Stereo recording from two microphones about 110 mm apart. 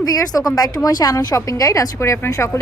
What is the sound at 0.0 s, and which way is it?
A woman's voice, 35° left (ahead or behind).